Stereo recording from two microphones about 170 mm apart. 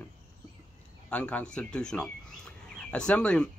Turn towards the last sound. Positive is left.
turn(degrees=5)  # may be behind; listen again after turning